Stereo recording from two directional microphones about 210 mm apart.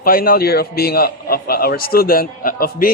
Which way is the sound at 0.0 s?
45° left (ahead or behind).